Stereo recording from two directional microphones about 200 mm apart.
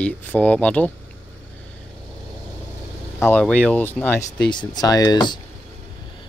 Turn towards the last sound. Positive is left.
turn(degrees=20)  # may be behind; listen again after turning